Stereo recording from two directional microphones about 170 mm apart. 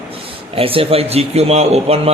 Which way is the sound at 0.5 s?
35° right (ahead or behind).